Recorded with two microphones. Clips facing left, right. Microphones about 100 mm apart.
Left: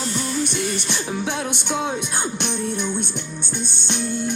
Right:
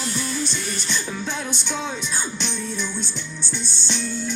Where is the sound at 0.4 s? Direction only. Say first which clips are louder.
Left 4 dB; 60° left (ahead or behind).